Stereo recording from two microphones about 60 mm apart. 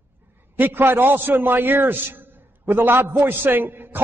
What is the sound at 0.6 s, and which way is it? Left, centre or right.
A man's voice, right.